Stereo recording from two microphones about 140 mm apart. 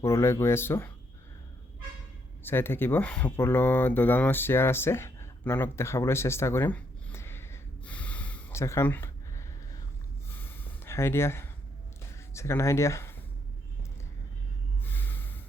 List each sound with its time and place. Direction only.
0.0 s speech: 20° left (ahead or behind)
2.4 s speech: 15° left (ahead or behind)
10.2 s a sound: 15° left (ahead or behind)
12.3 s speech: 20° left (ahead or behind)
14.8 s gasp: 15° left (ahead or behind)